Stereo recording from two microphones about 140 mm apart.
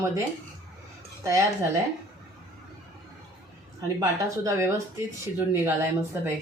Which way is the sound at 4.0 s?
20° right (ahead or behind).